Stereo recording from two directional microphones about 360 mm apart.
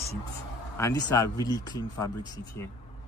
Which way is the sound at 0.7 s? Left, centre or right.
Centre.